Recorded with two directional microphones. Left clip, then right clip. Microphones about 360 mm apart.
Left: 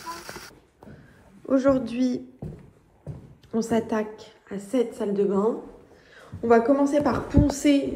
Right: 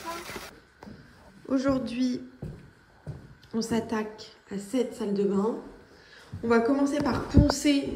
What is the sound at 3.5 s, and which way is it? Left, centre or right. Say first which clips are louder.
A woman's voice: left 5 dB; centre.